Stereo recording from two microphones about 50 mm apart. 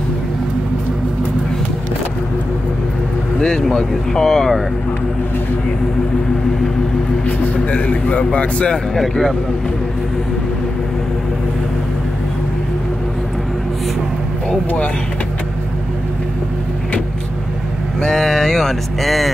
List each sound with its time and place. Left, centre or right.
3.3 s vehicle: centre
3.7 s speech: centre
7.2 s a man's voice: left
8.9 s speech: centre
18.0 s speech: centre